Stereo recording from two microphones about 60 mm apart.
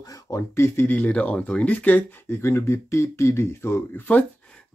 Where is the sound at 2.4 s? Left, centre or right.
Left.